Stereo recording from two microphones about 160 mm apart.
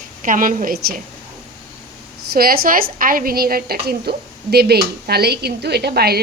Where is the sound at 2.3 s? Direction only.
70° right (ahead or behind).